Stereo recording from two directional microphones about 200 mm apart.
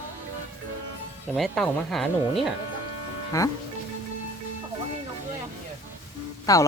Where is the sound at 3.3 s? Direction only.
15° left (ahead or behind).